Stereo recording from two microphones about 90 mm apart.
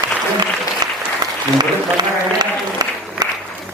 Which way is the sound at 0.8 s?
50° right (ahead or behind).